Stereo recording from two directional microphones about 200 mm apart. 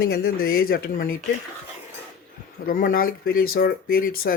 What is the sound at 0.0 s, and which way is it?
Speech, 50° left (ahead or behind).